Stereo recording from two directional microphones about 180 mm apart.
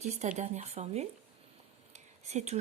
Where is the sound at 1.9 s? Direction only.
40° right (ahead or behind).